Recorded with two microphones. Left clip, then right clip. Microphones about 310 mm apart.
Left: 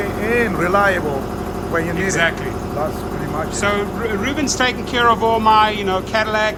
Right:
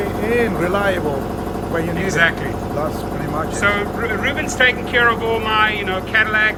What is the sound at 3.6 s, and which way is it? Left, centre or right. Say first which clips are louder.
Speech: right 2 dB; centre.